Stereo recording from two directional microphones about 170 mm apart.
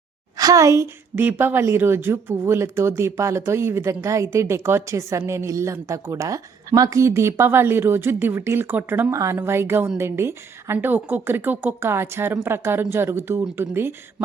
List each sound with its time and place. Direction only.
0.3 s a woman's voice: 20° right (ahead or behind)